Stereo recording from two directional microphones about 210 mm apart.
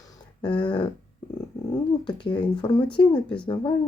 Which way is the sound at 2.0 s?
20° left (ahead or behind).